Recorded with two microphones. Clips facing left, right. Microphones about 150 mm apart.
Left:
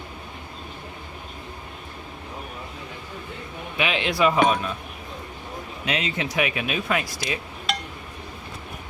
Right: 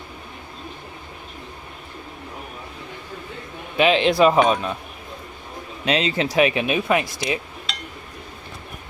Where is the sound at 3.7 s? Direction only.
30° right (ahead or behind).